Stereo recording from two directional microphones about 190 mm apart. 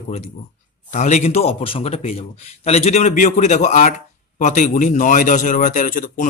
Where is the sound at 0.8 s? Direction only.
40° left (ahead or behind).